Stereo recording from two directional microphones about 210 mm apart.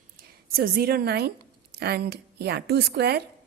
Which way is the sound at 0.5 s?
45° right (ahead or behind).